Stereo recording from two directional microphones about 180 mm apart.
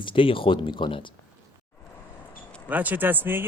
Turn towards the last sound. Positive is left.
turn(degrees=-10)  # may be behind; listen again after turning